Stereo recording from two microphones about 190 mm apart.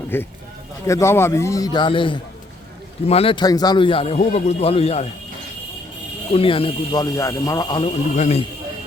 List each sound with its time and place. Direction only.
0.1 s a man's voice: 10° left (ahead or behind); by 5.0 s 30° left (ahead or behind)
6.3 s speech: 30° left (ahead or behind)
8.1 s speech: 40° left (ahead or behind)